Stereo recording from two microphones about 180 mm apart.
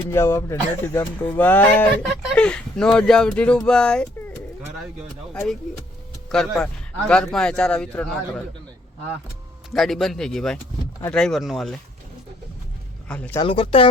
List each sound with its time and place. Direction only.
0.1 s a man's voice: 15° left (ahead or behind)
5.3 s a man's voice: 5° left (ahead or behind)
9.7 s a man's voice: centre (ahead or behind)
13.1 s speech: 10° left (ahead or behind)
13.4 s speech: 30° left (ahead or behind)